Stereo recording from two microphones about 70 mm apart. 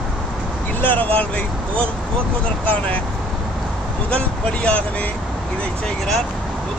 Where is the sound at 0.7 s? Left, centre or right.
Left.